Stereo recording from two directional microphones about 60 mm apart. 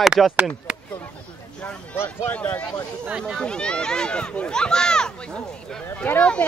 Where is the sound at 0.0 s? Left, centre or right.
Centre.